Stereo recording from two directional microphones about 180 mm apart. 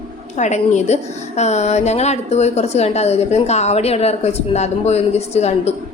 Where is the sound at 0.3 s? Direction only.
40° left (ahead or behind).